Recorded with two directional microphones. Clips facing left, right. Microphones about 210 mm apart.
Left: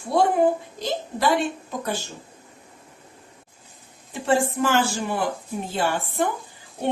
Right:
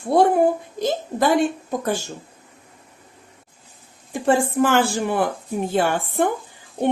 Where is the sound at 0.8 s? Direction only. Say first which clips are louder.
Right 5 dB; 50° right (ahead or behind).